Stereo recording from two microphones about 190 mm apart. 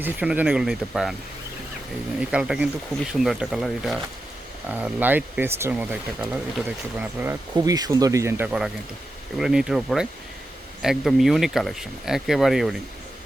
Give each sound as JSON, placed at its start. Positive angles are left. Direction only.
{"t": 0.0, "sound": "speech", "side_deg": -10}
{"t": 2.3, "sound": "speech", "side_deg": -5}